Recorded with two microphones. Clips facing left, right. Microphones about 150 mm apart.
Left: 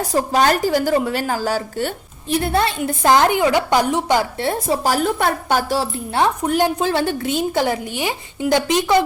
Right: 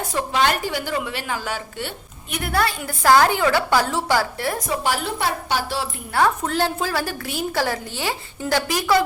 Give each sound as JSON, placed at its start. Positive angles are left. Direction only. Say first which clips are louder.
{"t": 0.0, "sound": "a woman's voice", "louder": "left 4 dB", "side_deg": 40}
{"t": 2.3, "sound": "a woman's voice", "louder": "left 4 dB", "side_deg": 25}
{"t": 6.1, "sound": "a woman's voice", "louder": "left 2 dB", "side_deg": 20}